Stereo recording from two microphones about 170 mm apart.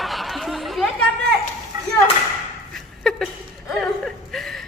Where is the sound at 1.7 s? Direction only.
20° right (ahead or behind).